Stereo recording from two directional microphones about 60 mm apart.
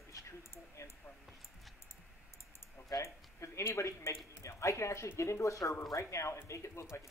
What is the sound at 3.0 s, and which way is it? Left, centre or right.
A woman's voice, left.